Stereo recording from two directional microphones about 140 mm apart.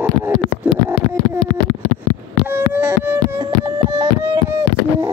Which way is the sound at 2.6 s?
15° right (ahead or behind).